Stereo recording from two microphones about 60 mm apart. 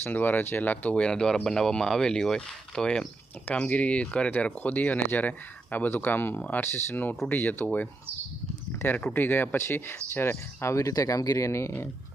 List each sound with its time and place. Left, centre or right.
0.0 s speech: left
9.1 s speech: left